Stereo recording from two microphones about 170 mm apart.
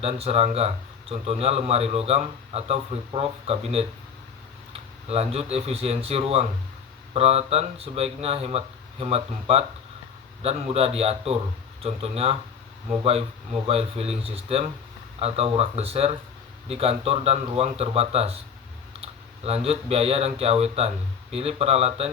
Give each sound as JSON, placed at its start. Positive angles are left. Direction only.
{"t": 0.0, "sound": "speech", "side_deg": -35}
{"t": 4.7, "sound": "speech", "side_deg": -35}
{"t": 19.5, "sound": "speech", "side_deg": -35}